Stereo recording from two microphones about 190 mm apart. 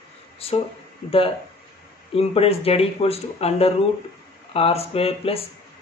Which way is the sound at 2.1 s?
30° left (ahead or behind).